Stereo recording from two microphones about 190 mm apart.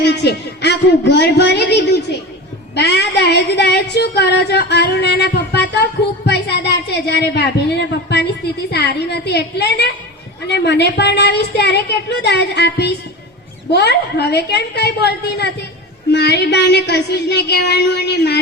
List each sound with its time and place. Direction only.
0.0 s female singing: 60° left (ahead or behind)